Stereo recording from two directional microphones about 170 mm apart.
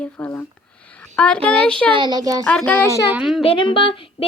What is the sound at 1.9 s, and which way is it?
Speech, 25° right (ahead or behind).